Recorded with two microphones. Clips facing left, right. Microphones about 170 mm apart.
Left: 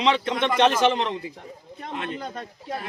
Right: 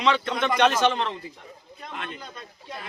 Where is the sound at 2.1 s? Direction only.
55° left (ahead or behind).